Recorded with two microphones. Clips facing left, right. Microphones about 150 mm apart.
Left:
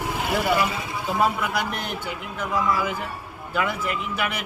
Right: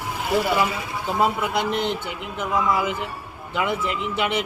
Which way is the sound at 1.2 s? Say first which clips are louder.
Right 2 dB; 25° right (ahead or behind).